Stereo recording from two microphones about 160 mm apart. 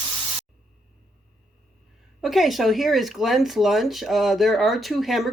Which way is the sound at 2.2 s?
Centre (ahead or behind).